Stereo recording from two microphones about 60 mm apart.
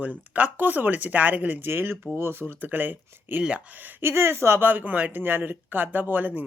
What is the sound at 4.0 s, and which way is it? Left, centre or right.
A man's voice, right.